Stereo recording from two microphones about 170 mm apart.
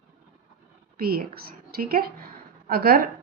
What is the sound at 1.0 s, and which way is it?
A woman's voice, 60° right (ahead or behind).